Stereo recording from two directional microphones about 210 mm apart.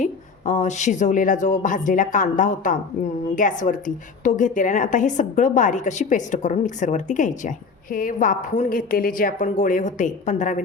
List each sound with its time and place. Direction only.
0.0 s a woman's voice: 35° left (ahead or behind)